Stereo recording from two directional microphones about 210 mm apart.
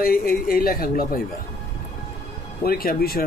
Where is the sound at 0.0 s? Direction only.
45° left (ahead or behind).